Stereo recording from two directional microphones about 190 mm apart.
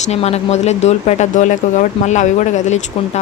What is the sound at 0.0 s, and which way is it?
Speech, 35° left (ahead or behind).